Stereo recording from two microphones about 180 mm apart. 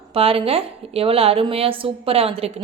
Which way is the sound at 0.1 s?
30° right (ahead or behind).